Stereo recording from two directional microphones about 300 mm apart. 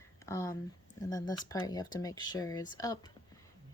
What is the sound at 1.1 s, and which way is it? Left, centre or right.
Speech, centre.